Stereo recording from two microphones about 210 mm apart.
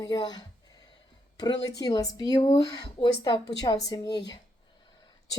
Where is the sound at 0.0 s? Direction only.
20° left (ahead or behind).